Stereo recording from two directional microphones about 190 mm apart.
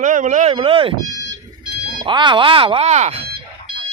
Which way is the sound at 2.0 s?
25° right (ahead or behind).